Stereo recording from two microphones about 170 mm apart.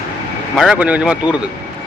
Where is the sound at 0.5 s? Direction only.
Centre (ahead or behind).